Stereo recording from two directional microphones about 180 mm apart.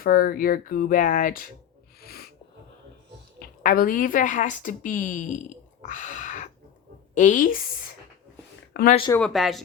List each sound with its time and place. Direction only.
0.0 s speech: 55° left (ahead or behind)
2.0 s snort: 60° left (ahead or behind)
3.6 s speech: 50° left (ahead or behind)
5.8 s a sound: 45° left (ahead or behind)
7.1 s speech: 45° left (ahead or behind)
9.1 s speech: centre (ahead or behind)